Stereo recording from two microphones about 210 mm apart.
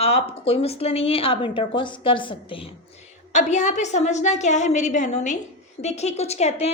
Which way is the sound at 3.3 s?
35° left (ahead or behind).